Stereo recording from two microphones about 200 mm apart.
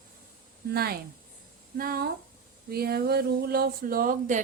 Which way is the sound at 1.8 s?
50° right (ahead or behind).